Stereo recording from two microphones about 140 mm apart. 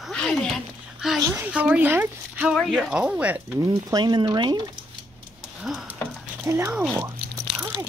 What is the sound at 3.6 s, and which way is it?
Speech, 25° right (ahead or behind).